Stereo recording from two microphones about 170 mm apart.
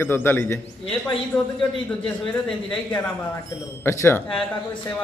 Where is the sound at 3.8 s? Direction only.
15° left (ahead or behind).